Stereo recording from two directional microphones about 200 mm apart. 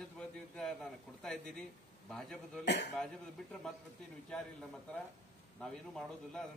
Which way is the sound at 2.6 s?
60° left (ahead or behind).